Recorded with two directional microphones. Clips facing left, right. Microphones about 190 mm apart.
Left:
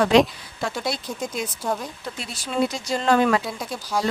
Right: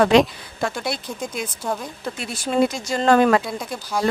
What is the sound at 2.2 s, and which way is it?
Speech, 50° right (ahead or behind).